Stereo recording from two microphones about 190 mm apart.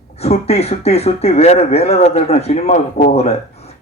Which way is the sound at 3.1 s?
35° left (ahead or behind).